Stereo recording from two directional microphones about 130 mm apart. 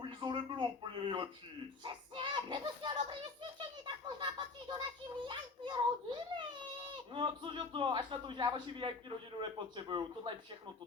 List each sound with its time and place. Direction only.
0.0 s a man's voice: 35° right (ahead or behind)
3.6 s a sound: 35° right (ahead or behind)
5.2 s children playing: 35° right (ahead or behind)
7.1 s a man's voice: 40° right (ahead or behind)